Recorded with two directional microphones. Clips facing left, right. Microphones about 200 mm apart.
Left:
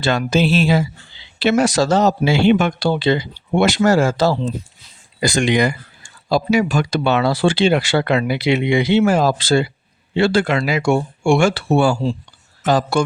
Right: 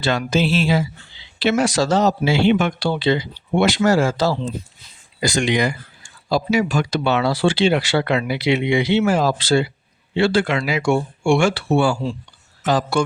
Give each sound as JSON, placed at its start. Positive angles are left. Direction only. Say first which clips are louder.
{"t": 0.0, "sound": "speech", "louder": "left 2 dB", "side_deg": 50}